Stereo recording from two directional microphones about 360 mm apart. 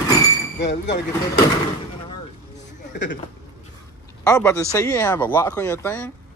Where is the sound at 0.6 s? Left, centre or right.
Left.